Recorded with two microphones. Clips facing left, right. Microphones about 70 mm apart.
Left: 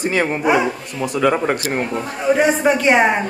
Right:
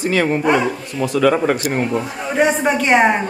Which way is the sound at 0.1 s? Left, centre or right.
Centre.